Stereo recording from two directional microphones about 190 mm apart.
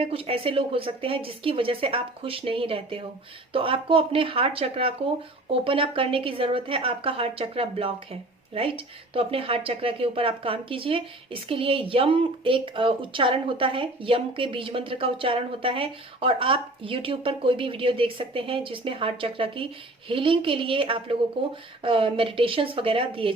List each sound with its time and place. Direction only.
0.0 s speech: 30° right (ahead or behind)